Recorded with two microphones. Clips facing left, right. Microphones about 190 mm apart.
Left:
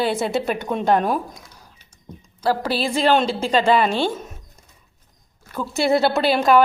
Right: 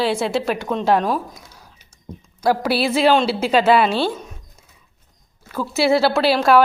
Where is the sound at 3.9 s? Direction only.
10° left (ahead or behind).